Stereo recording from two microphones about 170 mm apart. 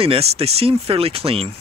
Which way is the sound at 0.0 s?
35° right (ahead or behind).